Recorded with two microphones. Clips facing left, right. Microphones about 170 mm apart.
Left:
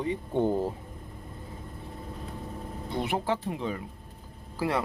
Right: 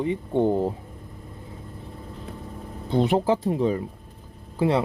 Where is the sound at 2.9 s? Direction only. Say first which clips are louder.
Right 8 dB; 30° right (ahead or behind).